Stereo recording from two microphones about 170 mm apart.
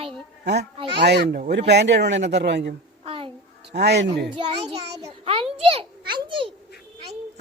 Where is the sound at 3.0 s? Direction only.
35° right (ahead or behind).